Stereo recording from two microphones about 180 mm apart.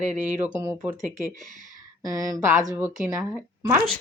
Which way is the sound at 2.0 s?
20° right (ahead or behind).